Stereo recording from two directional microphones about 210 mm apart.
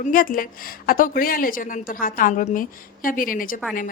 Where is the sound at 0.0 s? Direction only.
40° left (ahead or behind).